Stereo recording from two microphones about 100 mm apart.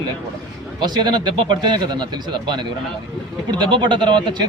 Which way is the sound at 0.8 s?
45° right (ahead or behind).